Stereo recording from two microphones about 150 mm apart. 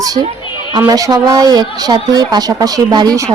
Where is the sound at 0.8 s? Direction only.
25° right (ahead or behind).